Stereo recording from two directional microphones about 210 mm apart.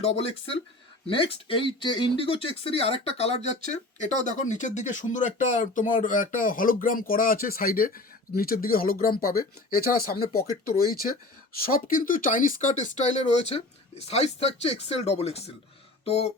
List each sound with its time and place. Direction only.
0.2 s speech: 25° left (ahead or behind); by 10.2 s 45° left (ahead or behind)
11.5 s speech: 45° left (ahead or behind)